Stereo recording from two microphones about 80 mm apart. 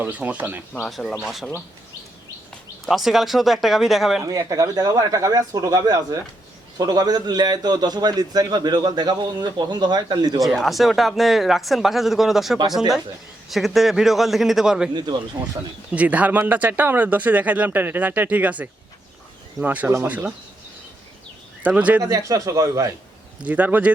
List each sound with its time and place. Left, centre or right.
0.0 s speech: centre
0.9 s speech: centre
2.8 s speech: centre
4.2 s a man's voice: right
10.4 s speech: centre
15.9 s speech: centre
21.6 s speech: centre
22.0 s speech: right
23.4 s speech: centre